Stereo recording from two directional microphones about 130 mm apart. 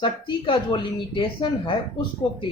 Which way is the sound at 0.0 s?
40° left (ahead or behind).